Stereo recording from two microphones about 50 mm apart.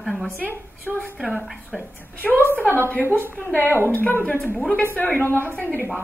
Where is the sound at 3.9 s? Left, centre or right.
Left.